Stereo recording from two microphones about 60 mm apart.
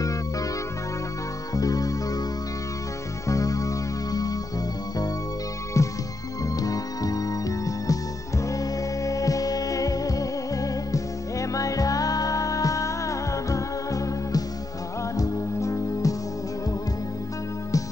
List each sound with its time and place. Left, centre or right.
1.5 s music: left
3.3 s music: left
5.8 s music: left
6.6 s music: left